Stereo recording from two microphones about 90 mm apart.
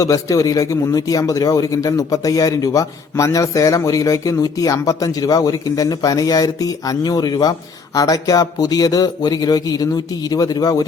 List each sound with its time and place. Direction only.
0.0 s a man's voice: 40° left (ahead or behind)